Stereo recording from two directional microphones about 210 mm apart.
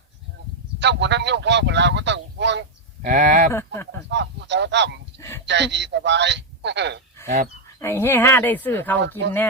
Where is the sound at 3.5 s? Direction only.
10° left (ahead or behind).